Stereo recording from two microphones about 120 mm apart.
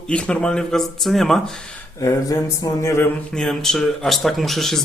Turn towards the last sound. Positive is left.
turn(degrees=0)  # may be behind; listen again after turning